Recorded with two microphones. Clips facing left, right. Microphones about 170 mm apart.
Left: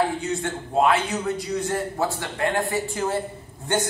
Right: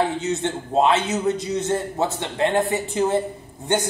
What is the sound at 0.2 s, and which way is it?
A man's voice, 25° right (ahead or behind).